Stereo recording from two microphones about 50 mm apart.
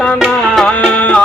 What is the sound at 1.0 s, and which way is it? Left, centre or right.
Music, left.